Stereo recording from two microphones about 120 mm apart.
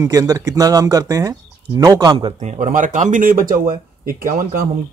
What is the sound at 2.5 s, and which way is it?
Speech, 90° right.